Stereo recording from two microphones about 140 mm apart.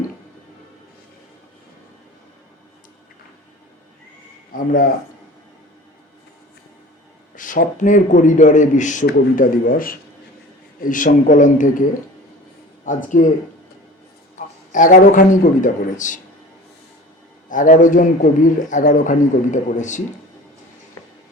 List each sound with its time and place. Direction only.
4.5 s speech: 80° left
7.3 s a man's voice: 70° left (ahead or behind); by 10.0 s 85° left
10.8 s a man's voice: 70° left (ahead or behind)
14.3 s a man's voice: 70° left (ahead or behind)
17.5 s a man's voice: 70° left (ahead or behind)